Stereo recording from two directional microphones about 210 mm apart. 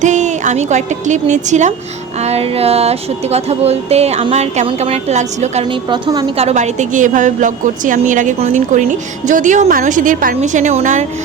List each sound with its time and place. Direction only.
0.0 s a woman's voice: 35° right (ahead or behind)
2.2 s music: 30° right (ahead or behind)
6.1 s a woman's voice: 30° right (ahead or behind)